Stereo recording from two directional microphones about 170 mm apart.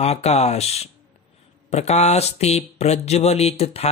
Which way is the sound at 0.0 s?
40° left (ahead or behind).